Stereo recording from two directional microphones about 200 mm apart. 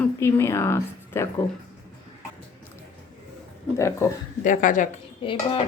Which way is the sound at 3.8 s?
15° left (ahead or behind).